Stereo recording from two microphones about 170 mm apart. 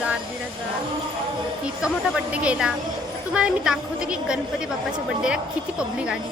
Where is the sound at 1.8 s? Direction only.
5° right (ahead or behind).